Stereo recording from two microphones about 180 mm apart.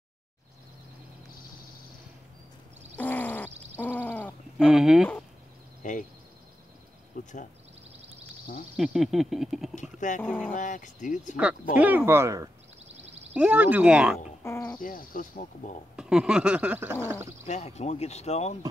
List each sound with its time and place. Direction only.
3.0 s a sound: 10° left (ahead or behind)
4.6 s speech: 5° right (ahead or behind)
5.8 s a sound: 45° left (ahead or behind)
7.2 s a sound: 45° left (ahead or behind)
8.7 s speech: centre (ahead or behind)
9.9 s speech: 45° left (ahead or behind)
11.7 s speech: 10° right (ahead or behind)
14.4 s speech: 10° left (ahead or behind)
14.8 s speech: 50° left (ahead or behind)
16.0 s speech: 5° right (ahead or behind)
17.5 s speech: 40° left (ahead or behind)